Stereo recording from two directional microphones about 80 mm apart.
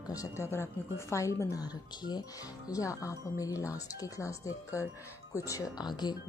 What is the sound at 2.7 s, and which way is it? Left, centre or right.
Speech, left.